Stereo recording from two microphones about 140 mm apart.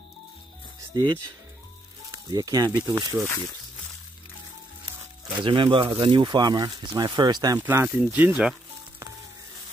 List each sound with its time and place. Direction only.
0.9 s speech: 30° right (ahead or behind)
2.3 s speech: 25° right (ahead or behind)
5.3 s speech: 35° right (ahead or behind)
7.5 s speech: 15° right (ahead or behind)